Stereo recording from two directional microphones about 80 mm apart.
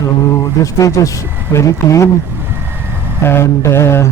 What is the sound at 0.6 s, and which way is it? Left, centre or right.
Speech, left.